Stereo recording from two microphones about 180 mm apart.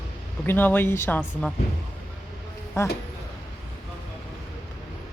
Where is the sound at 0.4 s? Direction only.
10° left (ahead or behind).